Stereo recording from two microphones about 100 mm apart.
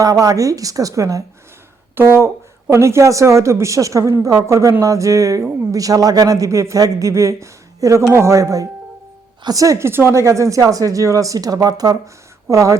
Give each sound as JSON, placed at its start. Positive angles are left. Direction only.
{"t": 0.0, "sound": "speech", "side_deg": -35}
{"t": 2.0, "sound": "speech", "side_deg": -25}